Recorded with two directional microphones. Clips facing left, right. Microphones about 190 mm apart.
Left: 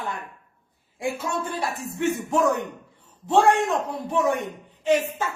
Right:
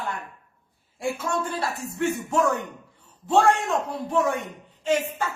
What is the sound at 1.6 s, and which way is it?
A man's voice, 20° left (ahead or behind).